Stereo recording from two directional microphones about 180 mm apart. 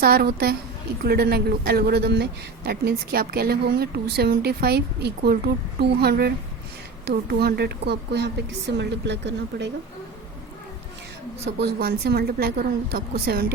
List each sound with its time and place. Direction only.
0.0 s a woman's voice: 60° right (ahead or behind)
11.4 s speech: 65° right (ahead or behind)